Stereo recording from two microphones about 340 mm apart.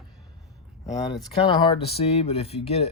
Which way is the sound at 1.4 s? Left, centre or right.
Centre.